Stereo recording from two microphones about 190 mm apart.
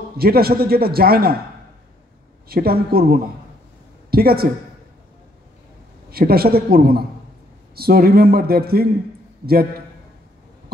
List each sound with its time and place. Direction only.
0.2 s a man's voice: 55° right (ahead or behind)
2.4 s a man's voice: 55° right (ahead or behind)
6.0 s a man's voice: 55° right (ahead or behind)